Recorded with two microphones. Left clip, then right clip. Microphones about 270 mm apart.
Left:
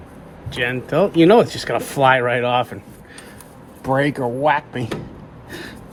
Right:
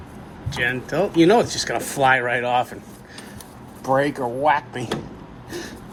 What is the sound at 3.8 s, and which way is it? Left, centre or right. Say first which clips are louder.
Speech: left 1 dB; left.